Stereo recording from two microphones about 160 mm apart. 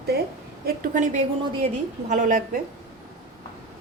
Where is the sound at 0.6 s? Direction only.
60° right (ahead or behind).